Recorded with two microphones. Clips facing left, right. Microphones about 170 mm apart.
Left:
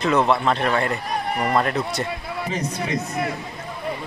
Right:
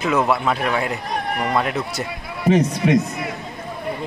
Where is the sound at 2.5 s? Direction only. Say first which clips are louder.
Right 12 dB; 90° right.